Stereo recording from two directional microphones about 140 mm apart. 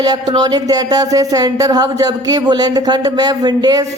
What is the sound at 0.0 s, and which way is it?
Speech, 30° right (ahead or behind).